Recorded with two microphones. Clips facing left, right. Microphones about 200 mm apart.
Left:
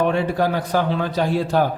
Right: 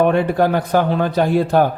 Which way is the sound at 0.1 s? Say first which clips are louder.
Right 4 dB; 55° right (ahead or behind).